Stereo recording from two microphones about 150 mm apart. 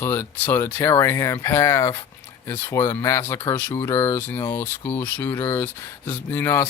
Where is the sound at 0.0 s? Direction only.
15° left (ahead or behind).